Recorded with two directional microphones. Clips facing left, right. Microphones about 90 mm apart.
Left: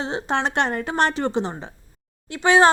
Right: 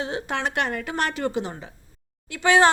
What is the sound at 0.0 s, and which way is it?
A woman's voice, 30° left (ahead or behind).